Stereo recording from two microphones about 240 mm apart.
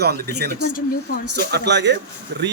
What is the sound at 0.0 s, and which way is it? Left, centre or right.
A man's voice, right.